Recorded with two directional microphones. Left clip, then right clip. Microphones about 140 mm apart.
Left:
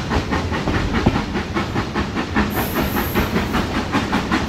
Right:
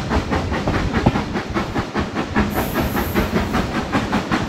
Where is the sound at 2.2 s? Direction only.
50° right (ahead or behind).